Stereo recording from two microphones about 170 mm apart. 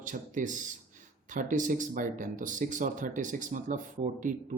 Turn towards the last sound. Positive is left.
turn(degrees=-50)  # may be behind; listen again after turning